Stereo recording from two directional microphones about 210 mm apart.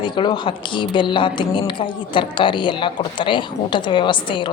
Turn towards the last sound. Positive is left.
turn(degrees=25)  # may be behind; listen again after turning